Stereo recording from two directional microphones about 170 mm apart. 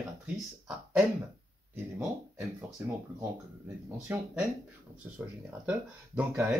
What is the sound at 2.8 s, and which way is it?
Speech, 10° right (ahead or behind).